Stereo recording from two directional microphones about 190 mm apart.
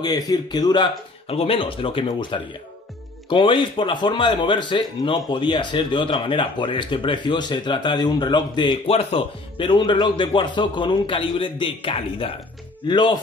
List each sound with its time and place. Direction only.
0.0 s speech: 20° left (ahead or behind)